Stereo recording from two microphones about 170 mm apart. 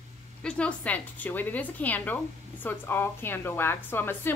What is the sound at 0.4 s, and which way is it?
A woman's voice, 5° left (ahead or behind).